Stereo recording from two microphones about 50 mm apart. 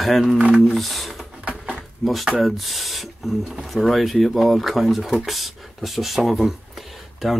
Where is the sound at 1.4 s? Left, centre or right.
Right.